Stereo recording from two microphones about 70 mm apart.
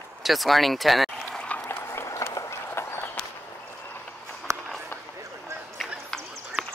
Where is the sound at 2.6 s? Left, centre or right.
Left.